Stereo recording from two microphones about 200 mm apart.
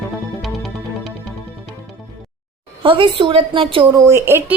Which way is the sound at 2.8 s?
25° right (ahead or behind).